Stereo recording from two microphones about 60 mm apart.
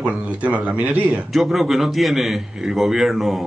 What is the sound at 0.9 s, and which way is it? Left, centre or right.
A man's voice, centre.